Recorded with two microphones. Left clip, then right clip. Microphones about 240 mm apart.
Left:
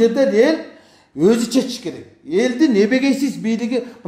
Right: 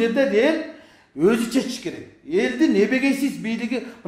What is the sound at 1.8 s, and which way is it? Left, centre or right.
A woman's voice, left.